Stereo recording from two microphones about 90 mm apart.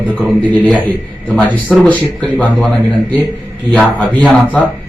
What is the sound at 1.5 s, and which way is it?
Speech, 20° left (ahead or behind).